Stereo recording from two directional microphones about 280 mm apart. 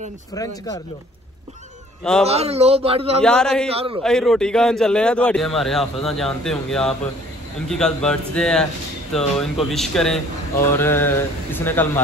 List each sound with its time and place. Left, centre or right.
0.3 s speech: centre
2.2 s a man's voice: right
3.2 s a man's voice: centre
3.6 s a man's voice: centre
4.0 s a man's voice: centre